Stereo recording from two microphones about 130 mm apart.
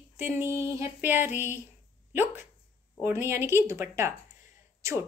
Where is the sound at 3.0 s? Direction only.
20° right (ahead or behind).